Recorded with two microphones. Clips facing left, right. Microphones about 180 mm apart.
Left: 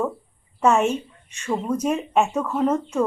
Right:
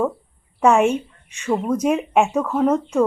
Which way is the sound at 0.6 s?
10° right (ahead or behind).